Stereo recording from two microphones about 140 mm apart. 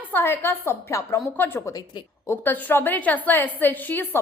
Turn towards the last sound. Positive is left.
turn(degrees=15)  # may be behind; listen again after turning